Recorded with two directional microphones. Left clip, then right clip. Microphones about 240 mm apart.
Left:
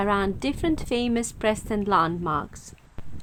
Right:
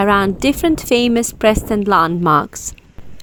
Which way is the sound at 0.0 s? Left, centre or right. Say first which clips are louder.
Right 10 dB; right.